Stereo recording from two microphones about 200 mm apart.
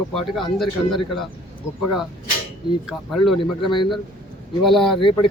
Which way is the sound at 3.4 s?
25° left (ahead or behind).